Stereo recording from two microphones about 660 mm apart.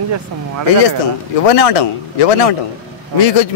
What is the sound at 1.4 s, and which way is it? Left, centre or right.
A man's voice, left.